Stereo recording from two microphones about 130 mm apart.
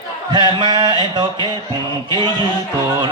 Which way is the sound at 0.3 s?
35° right (ahead or behind).